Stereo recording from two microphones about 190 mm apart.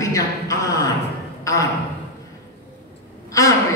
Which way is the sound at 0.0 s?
15° left (ahead or behind).